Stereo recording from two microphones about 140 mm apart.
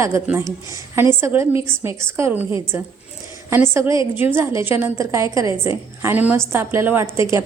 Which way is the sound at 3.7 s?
20° right (ahead or behind).